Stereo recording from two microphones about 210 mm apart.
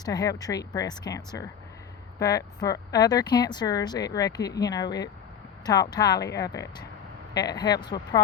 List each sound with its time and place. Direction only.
0.0 s speech: 20° left (ahead or behind)